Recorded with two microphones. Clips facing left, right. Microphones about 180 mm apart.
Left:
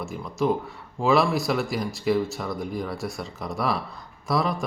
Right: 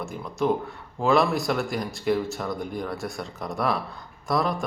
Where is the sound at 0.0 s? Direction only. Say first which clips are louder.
Left 1 dB; centre (ahead or behind).